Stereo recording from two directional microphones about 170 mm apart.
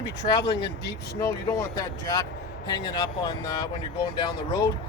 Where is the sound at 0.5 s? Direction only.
85° left.